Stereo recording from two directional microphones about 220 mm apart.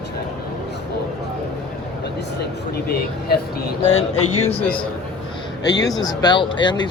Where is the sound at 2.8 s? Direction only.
45° left (ahead or behind).